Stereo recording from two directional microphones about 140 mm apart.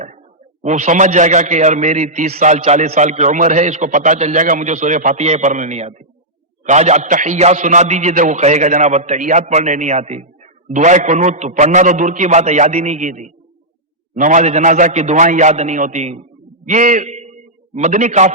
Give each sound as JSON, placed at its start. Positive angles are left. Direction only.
{"t": 0.6, "sound": "a man's voice", "side_deg": -60}